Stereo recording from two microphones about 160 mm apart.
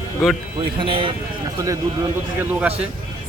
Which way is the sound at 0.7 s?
30° right (ahead or behind).